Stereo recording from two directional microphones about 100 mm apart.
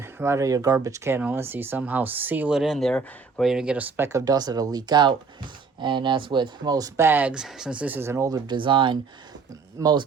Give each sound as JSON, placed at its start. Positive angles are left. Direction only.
{"t": 0.0, "sound": "speech", "side_deg": -25}
{"t": 2.6, "sound": "speech", "side_deg": 0}
{"t": 3.5, "sound": "speech", "side_deg": -10}
{"t": 3.9, "sound": "speech", "side_deg": -25}
{"t": 4.3, "sound": "speech", "side_deg": -40}
{"t": 6.9, "sound": "speech", "side_deg": -20}
{"t": 8.3, "sound": "speech", "side_deg": -50}
{"t": 9.7, "sound": "speech", "side_deg": -40}